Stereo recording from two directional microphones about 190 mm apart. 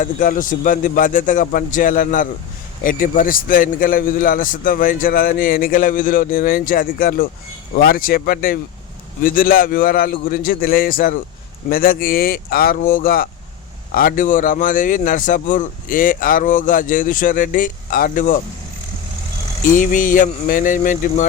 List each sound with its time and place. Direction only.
0.0 s speech: 45° left (ahead or behind)
19.6 s speech: 45° left (ahead or behind)